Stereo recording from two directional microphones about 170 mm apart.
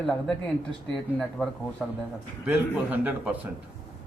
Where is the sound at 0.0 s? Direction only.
Centre (ahead or behind).